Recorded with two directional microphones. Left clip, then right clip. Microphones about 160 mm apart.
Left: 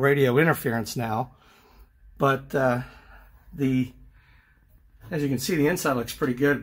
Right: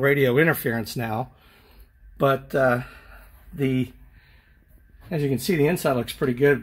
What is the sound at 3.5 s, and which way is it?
Speech, 10° right (ahead or behind).